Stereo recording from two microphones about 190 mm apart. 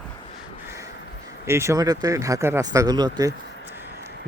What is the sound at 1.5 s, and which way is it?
A man's voice, 15° right (ahead or behind).